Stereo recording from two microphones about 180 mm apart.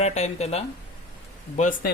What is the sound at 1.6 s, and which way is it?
Speech, 45° left (ahead or behind).